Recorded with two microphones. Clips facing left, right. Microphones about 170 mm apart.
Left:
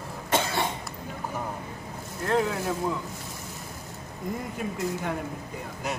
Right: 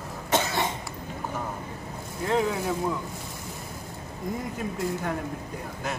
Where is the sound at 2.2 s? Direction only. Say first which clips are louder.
Even; centre (ahead or behind).